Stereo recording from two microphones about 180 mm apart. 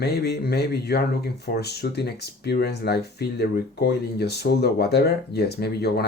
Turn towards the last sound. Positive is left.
turn(degrees=60)  # may be behind; listen again after turning